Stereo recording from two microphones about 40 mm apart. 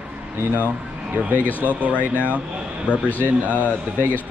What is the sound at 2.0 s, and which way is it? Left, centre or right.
Speech, right.